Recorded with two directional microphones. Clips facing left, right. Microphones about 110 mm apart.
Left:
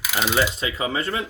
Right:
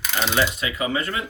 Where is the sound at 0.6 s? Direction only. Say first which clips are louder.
Even; 30° left (ahead or behind).